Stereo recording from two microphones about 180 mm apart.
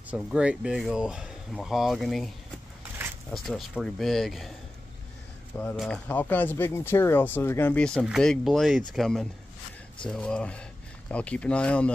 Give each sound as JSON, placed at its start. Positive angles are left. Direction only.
{"t": 0.1, "sound": "speech", "side_deg": -5}
{"t": 5.8, "sound": "speech", "side_deg": 5}